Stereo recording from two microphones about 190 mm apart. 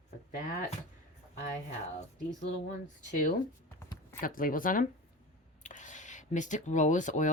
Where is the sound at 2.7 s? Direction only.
45° left (ahead or behind).